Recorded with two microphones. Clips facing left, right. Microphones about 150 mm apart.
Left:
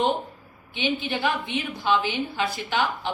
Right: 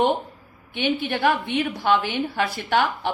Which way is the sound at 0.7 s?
60° right (ahead or behind).